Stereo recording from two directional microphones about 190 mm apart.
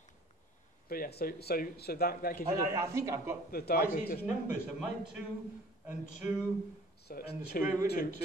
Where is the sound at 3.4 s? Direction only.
55° left (ahead or behind).